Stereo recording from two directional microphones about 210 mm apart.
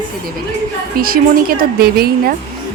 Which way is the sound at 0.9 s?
45° right (ahead or behind).